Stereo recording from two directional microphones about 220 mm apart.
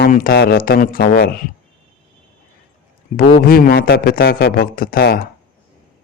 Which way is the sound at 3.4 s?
40° left (ahead or behind).